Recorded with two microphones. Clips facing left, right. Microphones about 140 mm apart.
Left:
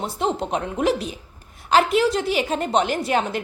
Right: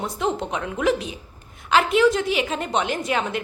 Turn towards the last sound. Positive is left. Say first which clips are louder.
# left 2 dB
turn(degrees=35)  # may be behind; listen again after turning